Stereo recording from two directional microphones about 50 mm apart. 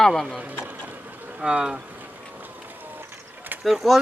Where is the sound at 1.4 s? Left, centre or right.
Centre.